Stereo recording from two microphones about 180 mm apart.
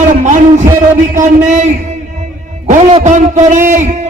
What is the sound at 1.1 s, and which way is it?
Speech, 45° right (ahead or behind).